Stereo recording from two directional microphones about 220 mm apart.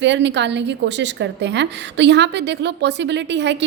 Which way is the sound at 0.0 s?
55° right (ahead or behind).